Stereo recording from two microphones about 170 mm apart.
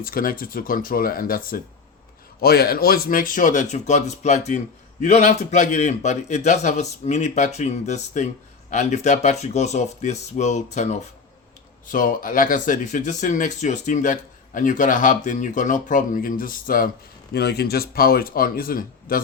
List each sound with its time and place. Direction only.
0.0 s speech: 55° left (ahead or behind)
17.3 s speech: 70° left (ahead or behind)